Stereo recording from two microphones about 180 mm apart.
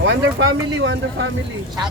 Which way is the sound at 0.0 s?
90° right.